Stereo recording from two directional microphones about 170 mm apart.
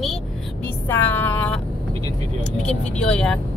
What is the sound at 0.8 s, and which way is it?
Music, 10° left (ahead or behind).